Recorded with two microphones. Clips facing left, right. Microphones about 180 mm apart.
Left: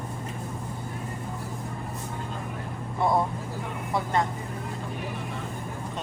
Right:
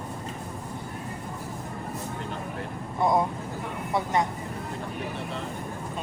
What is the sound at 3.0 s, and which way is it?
A woman's voice, 20° right (ahead or behind).